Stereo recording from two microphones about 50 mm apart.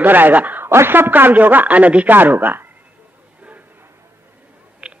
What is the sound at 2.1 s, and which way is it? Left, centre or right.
Speech, right.